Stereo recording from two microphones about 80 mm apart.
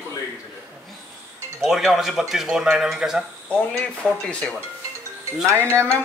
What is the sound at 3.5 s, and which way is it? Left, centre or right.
Speech, centre.